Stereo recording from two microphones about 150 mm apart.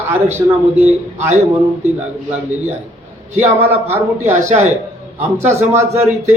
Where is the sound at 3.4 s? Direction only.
15° right (ahead or behind).